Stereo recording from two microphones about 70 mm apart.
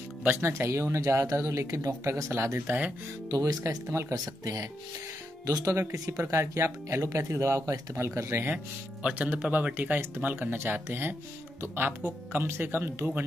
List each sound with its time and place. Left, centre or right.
0.4 s speech: right
1.2 s speech: right
3.3 s speech: right
3.6 s speech: right
5.8 s speech: right
9.0 s speech: centre